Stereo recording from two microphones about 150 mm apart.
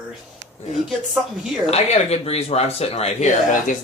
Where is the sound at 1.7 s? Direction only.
45° left (ahead or behind).